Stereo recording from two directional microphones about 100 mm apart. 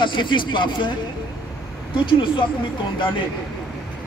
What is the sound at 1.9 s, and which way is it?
Speech, 55° left (ahead or behind).